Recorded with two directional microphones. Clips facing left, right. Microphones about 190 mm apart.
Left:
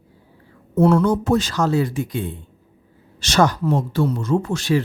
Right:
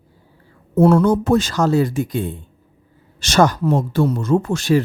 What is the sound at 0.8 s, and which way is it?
Speech, 45° right (ahead or behind).